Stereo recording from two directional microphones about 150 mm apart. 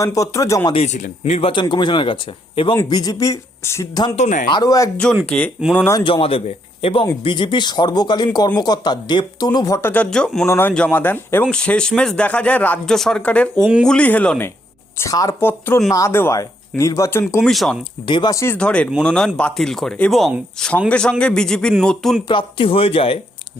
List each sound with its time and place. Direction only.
0.0 s speech: 20° left (ahead or behind)
0.7 s speech: 50° left (ahead or behind); by 4.1 s 20° left (ahead or behind)
4.1 s speech: 50° left (ahead or behind)
4.4 s speech: 30° left (ahead or behind)
5.2 s speech: 5° left (ahead or behind)
6.1 s speech: 35° left (ahead or behind); by 10.4 s 5° left (ahead or behind)
10.4 s speech: 15° left (ahead or behind)
13.6 s speech: 10° right (ahead or behind)
13.8 s speech: 10° left (ahead or behind)
17.4 s speech: centre (ahead or behind)
18.0 s speech: 30° left (ahead or behind); by 22.2 s centre (ahead or behind)
22.3 s speech: 35° left (ahead or behind)